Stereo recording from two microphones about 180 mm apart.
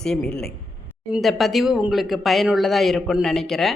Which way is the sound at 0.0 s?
5° left (ahead or behind).